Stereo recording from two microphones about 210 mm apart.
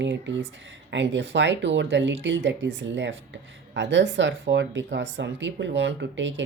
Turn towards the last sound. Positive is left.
turn(degrees=-60)  # may be behind; listen again after turning